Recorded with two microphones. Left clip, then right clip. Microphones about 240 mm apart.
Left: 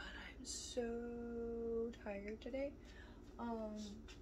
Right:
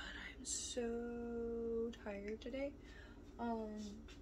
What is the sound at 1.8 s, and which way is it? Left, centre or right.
Speech, centre.